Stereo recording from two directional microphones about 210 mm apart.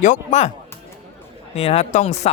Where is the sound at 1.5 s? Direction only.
30° left (ahead or behind).